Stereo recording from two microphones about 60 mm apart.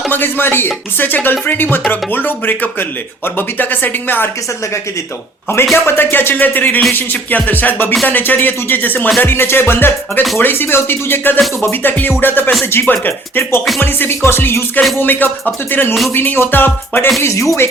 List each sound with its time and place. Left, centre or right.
0.1 s speech: left
5.7 s speech: left
6.9 s music: left
8.0 s speech: left
17.2 s speech: left